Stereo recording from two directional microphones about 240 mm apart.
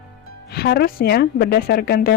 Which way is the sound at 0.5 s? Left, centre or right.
Left.